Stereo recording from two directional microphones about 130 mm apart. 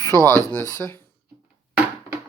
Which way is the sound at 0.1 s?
25° right (ahead or behind).